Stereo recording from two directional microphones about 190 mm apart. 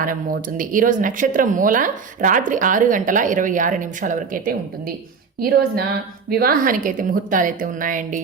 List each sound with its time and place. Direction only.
0.0 s speech: 45° right (ahead or behind)